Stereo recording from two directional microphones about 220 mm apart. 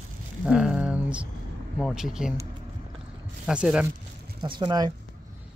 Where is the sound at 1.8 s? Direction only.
Centre (ahead or behind).